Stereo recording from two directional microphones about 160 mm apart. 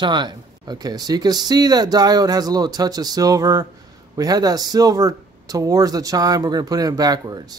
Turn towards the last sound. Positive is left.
turn(degrees=-25)  # may be behind; listen again after turning